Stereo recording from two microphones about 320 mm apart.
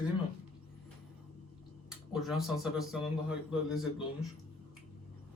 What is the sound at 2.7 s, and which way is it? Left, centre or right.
Speech, centre.